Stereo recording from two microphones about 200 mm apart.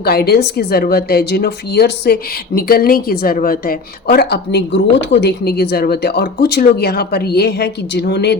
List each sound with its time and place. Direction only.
0.0 s a woman's voice: 50° left (ahead or behind)